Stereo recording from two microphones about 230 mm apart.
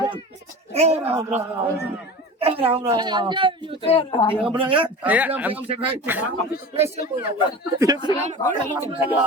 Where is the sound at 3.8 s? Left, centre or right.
Left.